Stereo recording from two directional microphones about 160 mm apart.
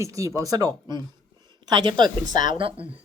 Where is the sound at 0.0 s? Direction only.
20° right (ahead or behind).